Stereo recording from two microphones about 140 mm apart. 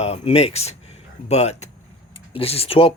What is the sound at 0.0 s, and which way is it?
Speech, 45° left (ahead or behind).